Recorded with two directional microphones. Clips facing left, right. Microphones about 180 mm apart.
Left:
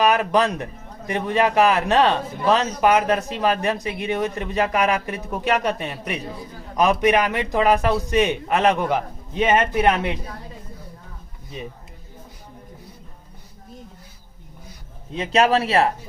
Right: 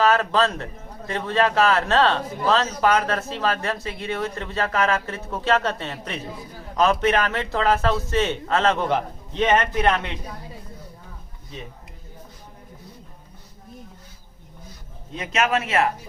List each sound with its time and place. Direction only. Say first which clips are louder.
0.0 s a man's voice: left 1 dB; 15° left (ahead or behind)
15.1 s speech: left 5 dB; 30° left (ahead or behind)